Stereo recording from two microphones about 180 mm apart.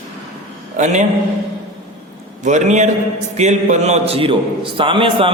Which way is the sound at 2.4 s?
40° right (ahead or behind).